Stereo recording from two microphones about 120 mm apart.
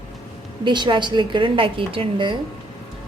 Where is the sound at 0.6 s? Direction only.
40° right (ahead or behind).